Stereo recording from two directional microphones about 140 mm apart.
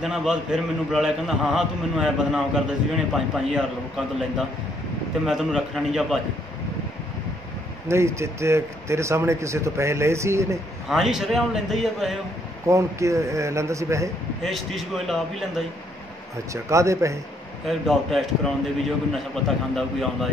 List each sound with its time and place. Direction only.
0.0 s a man's voice: 5° right (ahead or behind)
7.9 s a man's voice: 20° right (ahead or behind)
10.9 s a man's voice: centre (ahead or behind)
12.6 s a man's voice: 20° right (ahead or behind)
14.4 s a man's voice: centre (ahead or behind)
16.6 s a man's voice: 20° right (ahead or behind)
17.6 s a man's voice: centre (ahead or behind)